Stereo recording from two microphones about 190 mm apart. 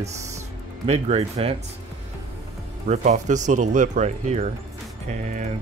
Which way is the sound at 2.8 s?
40° right (ahead or behind).